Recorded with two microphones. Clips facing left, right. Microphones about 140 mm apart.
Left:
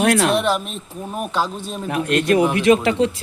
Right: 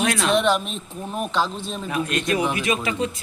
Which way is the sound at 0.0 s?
65° left (ahead or behind).